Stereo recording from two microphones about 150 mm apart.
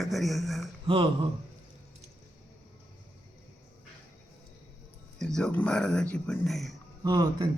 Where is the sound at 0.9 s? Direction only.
35° right (ahead or behind).